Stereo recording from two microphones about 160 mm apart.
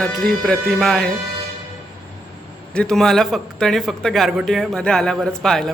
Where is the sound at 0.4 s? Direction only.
5° left (ahead or behind).